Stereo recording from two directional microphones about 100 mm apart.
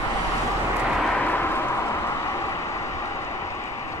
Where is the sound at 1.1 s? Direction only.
20° left (ahead or behind).